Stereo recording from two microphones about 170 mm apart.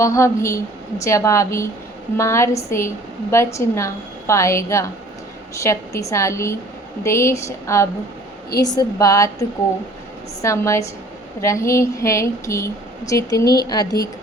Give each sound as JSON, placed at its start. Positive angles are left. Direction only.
{"t": 0.0, "sound": "a woman's voice", "side_deg": 15}